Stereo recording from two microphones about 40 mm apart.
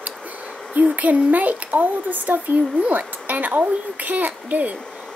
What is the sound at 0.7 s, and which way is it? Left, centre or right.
Speech, right.